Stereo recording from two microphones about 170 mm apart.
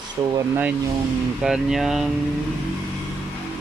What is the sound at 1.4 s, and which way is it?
Speech, 5° right (ahead or behind).